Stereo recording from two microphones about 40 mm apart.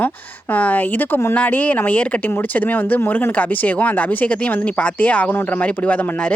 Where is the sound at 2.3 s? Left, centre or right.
Left.